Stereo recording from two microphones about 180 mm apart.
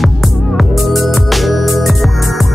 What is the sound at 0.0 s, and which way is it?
Music, centre (ahead or behind).